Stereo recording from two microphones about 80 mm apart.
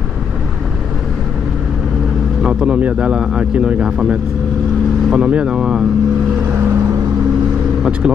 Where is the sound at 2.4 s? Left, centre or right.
Centre.